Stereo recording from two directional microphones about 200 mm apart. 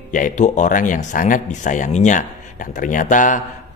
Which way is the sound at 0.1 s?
40° left (ahead or behind).